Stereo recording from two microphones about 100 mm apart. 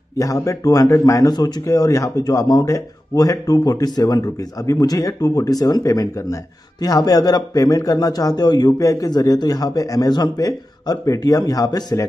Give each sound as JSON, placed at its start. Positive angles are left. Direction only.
{"t": 0.2, "sound": "speech", "side_deg": 30}